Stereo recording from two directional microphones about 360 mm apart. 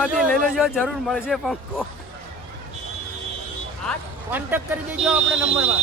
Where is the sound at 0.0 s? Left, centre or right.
Centre.